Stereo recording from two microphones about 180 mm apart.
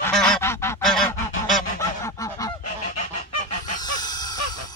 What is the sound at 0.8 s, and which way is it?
Goose, centre (ahead or behind).